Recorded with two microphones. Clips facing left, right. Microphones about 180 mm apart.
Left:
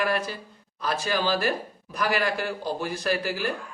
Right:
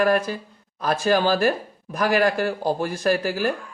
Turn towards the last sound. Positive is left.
turn(degrees=-45)  # may be behind; listen again after turning